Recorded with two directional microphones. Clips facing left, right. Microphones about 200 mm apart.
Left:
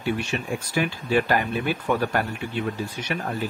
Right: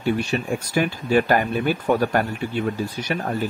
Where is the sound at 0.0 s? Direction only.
40° right (ahead or behind).